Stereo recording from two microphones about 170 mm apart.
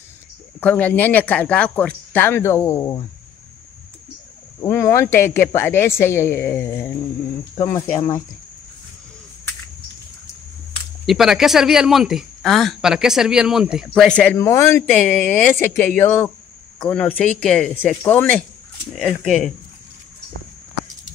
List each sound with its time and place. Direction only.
0.6 s speech: 10° left (ahead or behind)
4.6 s speech: 15° left (ahead or behind)
11.1 s speech: centre (ahead or behind)